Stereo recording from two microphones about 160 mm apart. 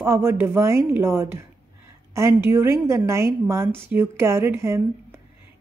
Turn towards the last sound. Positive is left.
turn(degrees=-15)  # may be behind; listen again after turning